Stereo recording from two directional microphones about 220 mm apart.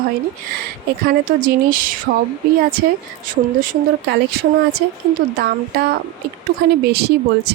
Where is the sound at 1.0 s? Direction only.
40° right (ahead or behind).